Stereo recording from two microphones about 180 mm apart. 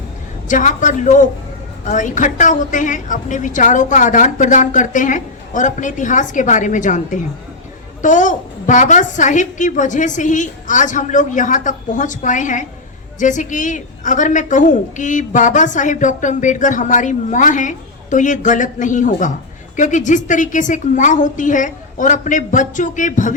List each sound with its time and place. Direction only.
0.4 s a woman's voice: 45° left (ahead or behind)